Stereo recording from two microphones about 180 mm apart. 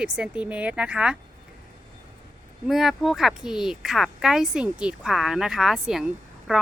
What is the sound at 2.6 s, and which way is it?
Speech, centre (ahead or behind).